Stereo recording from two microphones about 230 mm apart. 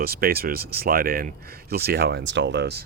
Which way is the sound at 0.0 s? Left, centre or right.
Right.